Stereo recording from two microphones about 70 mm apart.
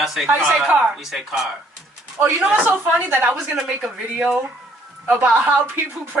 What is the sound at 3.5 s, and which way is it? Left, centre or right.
Speech, centre.